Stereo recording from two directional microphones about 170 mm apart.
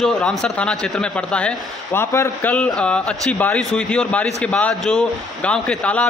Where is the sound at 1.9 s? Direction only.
15° left (ahead or behind).